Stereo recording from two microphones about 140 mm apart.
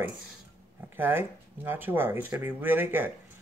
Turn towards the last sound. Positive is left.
turn(degrees=-15)  # may be behind; listen again after turning